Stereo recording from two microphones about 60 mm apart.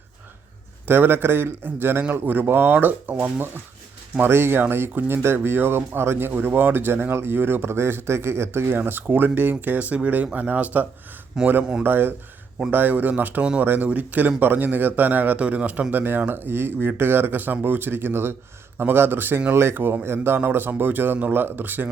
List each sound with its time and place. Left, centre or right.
0.9 s speech: right
8.8 s speech: right
11.3 s speech: centre
11.8 s speech: right
15.9 s speech: right